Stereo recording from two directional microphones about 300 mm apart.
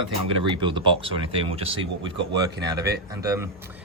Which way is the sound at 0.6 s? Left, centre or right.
Centre.